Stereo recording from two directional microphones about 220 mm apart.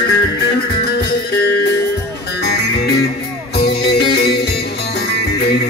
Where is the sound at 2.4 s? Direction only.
50° left (ahead or behind).